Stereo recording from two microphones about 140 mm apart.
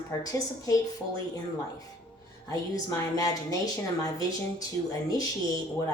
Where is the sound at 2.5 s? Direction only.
25° left (ahead or behind).